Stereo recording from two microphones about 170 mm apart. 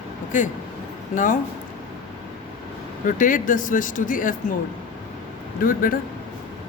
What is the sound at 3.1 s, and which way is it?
Speech, 50° left (ahead or behind).